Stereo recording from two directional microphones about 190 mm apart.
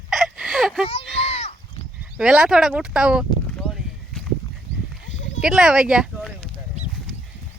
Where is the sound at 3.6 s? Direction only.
Centre (ahead or behind).